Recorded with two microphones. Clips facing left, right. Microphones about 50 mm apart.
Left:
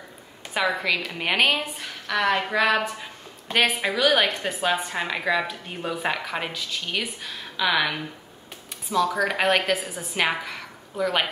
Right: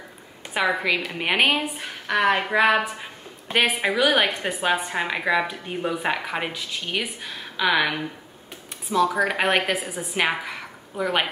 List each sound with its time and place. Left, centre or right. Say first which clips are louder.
0.6 s a woman's voice: right 2 dB; centre